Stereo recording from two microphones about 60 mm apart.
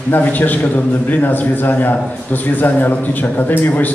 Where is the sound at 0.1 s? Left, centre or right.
Left.